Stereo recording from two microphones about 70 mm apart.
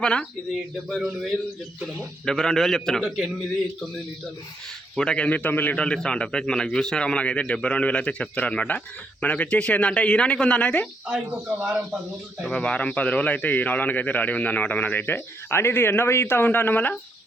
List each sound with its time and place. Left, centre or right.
0.0 s a man's voice: centre
0.5 s a man's voice: centre
4.9 s a man's voice: centre
5.7 s a man's voice: centre
12.5 s a man's voice: centre; by 17.0 s left